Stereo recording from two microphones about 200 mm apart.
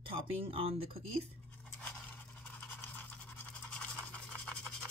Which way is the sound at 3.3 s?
5° left (ahead or behind).